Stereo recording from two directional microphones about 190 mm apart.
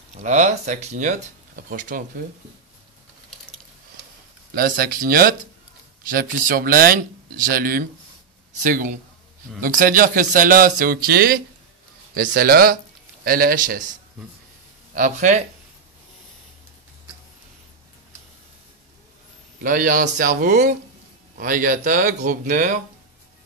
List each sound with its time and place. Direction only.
0.1 s speech: 40° right (ahead or behind)
4.6 s speech: 50° right (ahead or behind)
15.0 s speech: 40° right (ahead or behind)
19.6 s speech: 45° right (ahead or behind)